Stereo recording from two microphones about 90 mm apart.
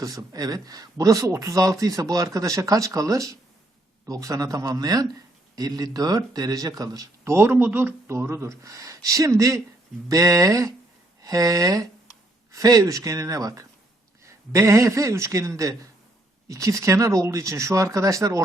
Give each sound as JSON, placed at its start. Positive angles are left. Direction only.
{"t": 0.0, "sound": "speech", "side_deg": -40}
{"t": 7.3, "sound": "speech", "side_deg": -25}